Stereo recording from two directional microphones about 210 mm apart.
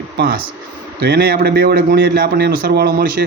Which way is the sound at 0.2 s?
45° right (ahead or behind).